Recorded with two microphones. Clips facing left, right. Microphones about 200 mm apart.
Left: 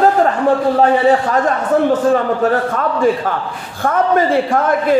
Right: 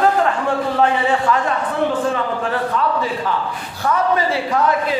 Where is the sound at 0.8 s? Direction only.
40° left (ahead or behind).